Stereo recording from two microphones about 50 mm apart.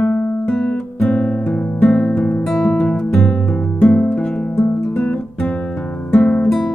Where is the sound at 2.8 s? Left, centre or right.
Left.